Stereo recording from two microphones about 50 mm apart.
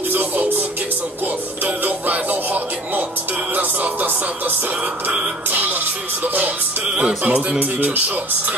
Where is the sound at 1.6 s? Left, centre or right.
Right.